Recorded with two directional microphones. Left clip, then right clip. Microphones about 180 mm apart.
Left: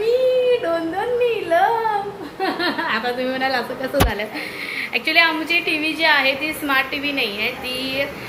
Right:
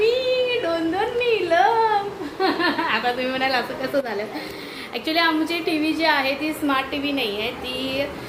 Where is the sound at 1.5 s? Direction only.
25° right (ahead or behind).